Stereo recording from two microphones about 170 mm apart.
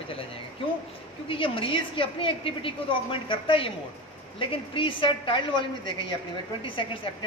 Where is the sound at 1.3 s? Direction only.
30° left (ahead or behind).